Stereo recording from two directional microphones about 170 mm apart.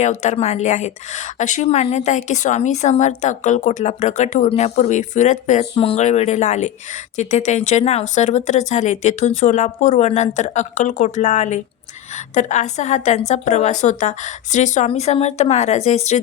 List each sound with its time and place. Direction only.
0.0 s speech: 45° left (ahead or behind)
5.7 s a woman's voice: 35° left (ahead or behind)